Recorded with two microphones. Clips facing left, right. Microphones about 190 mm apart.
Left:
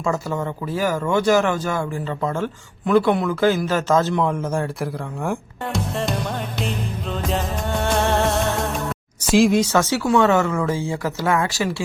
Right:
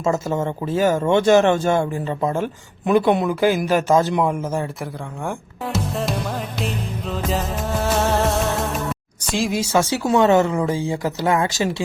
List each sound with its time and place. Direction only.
0.0 s speech: 20° right (ahead or behind)
9.9 s speech: 20° right (ahead or behind)